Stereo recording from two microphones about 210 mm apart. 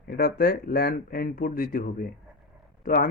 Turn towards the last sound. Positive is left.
turn(degrees=40)  # may be behind; listen again after turning